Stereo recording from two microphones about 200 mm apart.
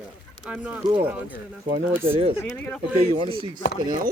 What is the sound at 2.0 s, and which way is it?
Chop, 25° right (ahead or behind).